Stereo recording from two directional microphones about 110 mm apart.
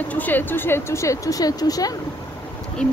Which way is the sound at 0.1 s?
15° left (ahead or behind).